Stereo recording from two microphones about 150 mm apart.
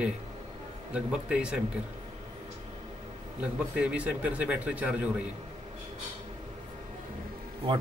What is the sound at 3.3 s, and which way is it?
A man's voice, 10° right (ahead or behind).